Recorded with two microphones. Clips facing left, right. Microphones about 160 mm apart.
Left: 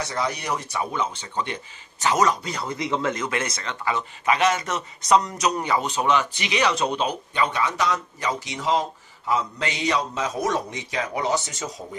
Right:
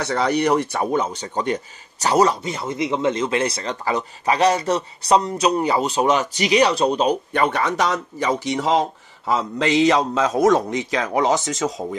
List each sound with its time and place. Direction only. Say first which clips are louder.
0.0 s speech: right 8 dB; 70° right (ahead or behind); by 7.2 s 35° right (ahead or behind)
7.3 s a man's voice: even; 60° right (ahead or behind); by 11.7 s 90° right